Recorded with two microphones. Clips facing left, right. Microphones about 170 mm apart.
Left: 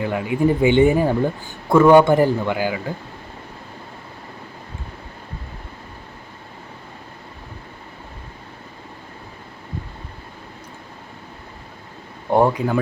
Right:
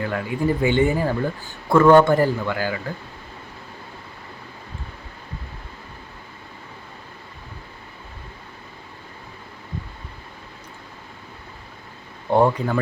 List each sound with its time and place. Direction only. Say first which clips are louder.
0.0 s speech: left 4 dB; 15° left (ahead or behind)
12.3 s speech: left 1 dB; 10° left (ahead or behind)